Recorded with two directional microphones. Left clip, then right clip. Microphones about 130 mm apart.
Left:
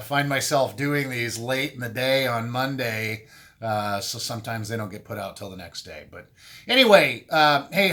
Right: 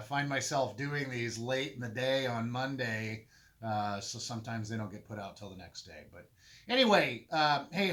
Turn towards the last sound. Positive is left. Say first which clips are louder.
# left 11 dB
turn(degrees=35)  # may be behind; listen again after turning